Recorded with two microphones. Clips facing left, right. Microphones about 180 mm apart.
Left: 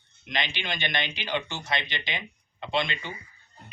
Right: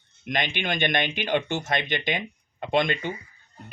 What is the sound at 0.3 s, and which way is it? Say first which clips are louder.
Speech: right 5 dB; 50° right (ahead or behind).